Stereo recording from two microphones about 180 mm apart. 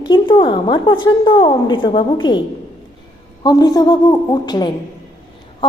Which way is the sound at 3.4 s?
20° left (ahead or behind).